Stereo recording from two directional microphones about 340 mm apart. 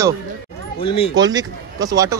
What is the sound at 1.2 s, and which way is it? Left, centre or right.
Speech, centre.